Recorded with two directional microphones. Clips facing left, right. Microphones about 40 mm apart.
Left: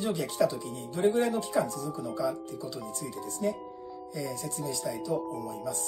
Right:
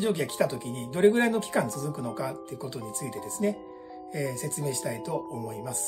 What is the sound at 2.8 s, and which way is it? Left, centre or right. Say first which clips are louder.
Speech: right 2 dB; right.